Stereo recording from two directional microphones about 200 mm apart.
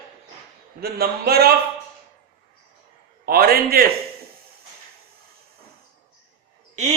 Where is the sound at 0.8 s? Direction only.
50° right (ahead or behind).